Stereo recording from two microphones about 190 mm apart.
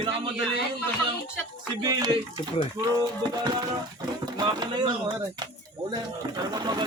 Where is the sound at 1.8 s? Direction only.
20° right (ahead or behind).